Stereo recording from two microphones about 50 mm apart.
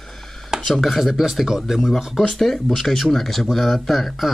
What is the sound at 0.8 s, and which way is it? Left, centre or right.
Speech, centre.